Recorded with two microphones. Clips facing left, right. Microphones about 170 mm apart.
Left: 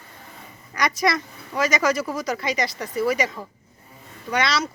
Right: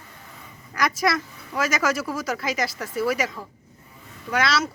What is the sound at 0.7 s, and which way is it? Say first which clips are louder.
A woman's voice: left 1 dB; centre (ahead or behind).